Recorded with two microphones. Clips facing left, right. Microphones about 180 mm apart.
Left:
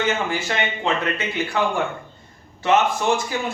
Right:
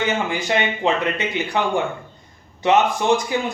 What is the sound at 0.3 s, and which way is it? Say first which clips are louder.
A man's voice: right 3 dB; 15° right (ahead or behind).